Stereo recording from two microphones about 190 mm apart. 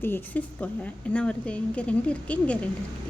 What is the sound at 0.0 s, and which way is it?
A woman's voice, 10° left (ahead or behind).